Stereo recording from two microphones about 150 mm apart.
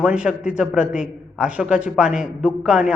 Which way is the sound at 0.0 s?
5° right (ahead or behind).